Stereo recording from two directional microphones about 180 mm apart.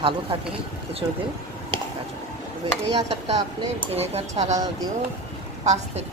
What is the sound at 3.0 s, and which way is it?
Speech, 35° right (ahead or behind).